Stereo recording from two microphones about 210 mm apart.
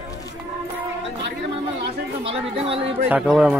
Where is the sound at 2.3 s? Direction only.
25° right (ahead or behind).